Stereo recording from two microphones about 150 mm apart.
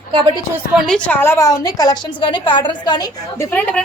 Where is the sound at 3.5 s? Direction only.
10° left (ahead or behind).